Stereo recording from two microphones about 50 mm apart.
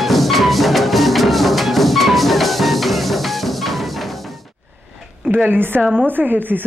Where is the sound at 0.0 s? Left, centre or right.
Centre.